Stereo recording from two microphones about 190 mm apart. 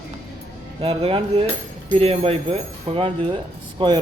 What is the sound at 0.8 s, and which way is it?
A man's voice, 30° right (ahead or behind).